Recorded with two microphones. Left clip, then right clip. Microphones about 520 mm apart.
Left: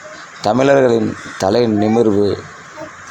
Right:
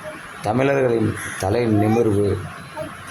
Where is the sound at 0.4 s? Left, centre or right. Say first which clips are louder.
Left 7 dB; right.